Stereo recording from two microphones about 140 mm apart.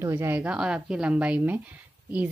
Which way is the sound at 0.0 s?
20° right (ahead or behind).